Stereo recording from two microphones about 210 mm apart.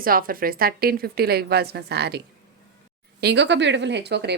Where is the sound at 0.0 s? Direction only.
45° right (ahead or behind).